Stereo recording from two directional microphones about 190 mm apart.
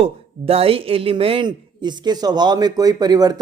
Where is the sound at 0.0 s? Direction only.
30° right (ahead or behind).